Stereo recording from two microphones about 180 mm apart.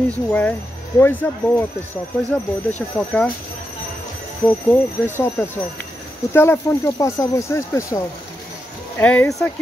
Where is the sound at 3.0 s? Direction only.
5° left (ahead or behind).